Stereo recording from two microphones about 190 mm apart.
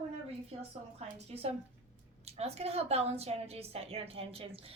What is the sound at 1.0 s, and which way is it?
Speech, 35° right (ahead or behind).